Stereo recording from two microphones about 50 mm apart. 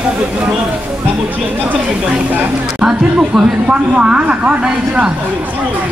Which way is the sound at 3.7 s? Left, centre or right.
Right.